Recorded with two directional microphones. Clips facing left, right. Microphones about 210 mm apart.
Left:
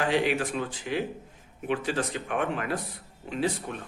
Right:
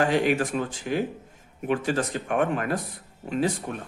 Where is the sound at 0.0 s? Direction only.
45° right (ahead or behind).